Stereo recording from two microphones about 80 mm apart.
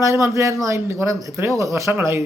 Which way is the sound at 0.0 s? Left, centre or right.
Right.